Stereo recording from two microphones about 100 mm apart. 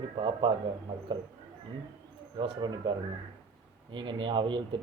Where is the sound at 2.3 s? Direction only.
50° right (ahead or behind).